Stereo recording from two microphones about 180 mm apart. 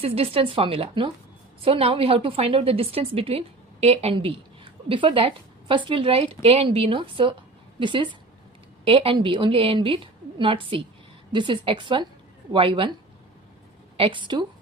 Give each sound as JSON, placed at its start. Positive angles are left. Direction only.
{"t": 0.0, "sound": "a woman's voice", "side_deg": -35}
{"t": 13.9, "sound": "a woman's voice", "side_deg": -30}